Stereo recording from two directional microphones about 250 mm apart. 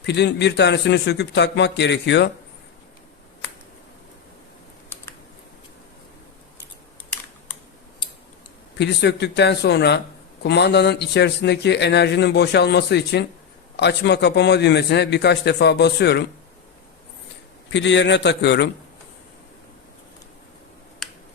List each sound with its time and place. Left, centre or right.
0.0 s a man's voice: left
8.8 s a man's voice: left
17.7 s a man's voice: left
21.0 s computer keyboard: centre